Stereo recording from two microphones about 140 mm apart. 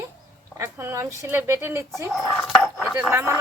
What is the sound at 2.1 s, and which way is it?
Speech, centre (ahead or behind).